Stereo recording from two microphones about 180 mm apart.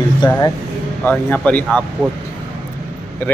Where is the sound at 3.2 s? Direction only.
10° left (ahead or behind).